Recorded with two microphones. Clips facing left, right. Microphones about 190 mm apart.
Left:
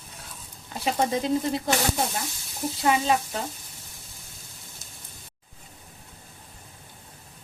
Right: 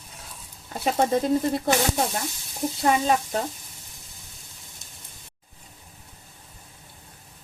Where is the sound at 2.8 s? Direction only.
45° right (ahead or behind).